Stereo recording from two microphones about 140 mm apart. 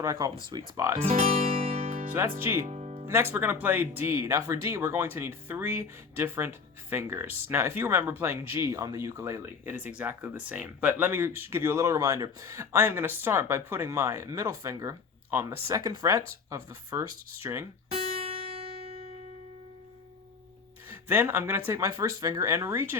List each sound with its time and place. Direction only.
0.0 s speech: 25° right (ahead or behind)
1.5 s music: 45° right (ahead or behind)
2.4 s speech: 15° right (ahead or behind)
2.6 s music: 50° right (ahead or behind)
3.1 s speech: 15° right (ahead or behind)
18.2 s music: 45° right (ahead or behind)
20.9 s speech: 15° right (ahead or behind)